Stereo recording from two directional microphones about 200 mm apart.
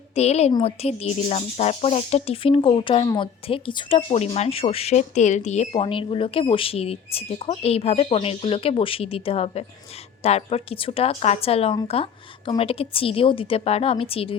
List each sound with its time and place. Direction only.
0.1 s a woman's voice: 30° left (ahead or behind)